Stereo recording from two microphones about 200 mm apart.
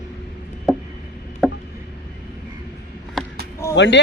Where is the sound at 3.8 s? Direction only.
60° left (ahead or behind).